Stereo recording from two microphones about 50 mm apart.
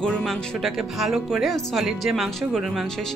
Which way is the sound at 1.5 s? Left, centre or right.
Centre.